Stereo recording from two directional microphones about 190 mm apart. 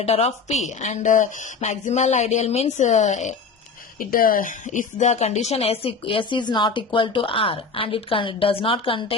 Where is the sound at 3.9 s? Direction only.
50° left (ahead or behind).